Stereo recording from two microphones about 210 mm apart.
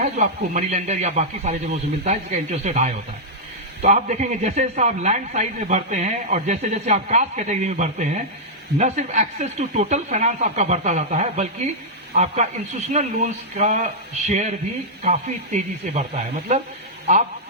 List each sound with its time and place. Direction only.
0.0 s a man's voice: 35° right (ahead or behind)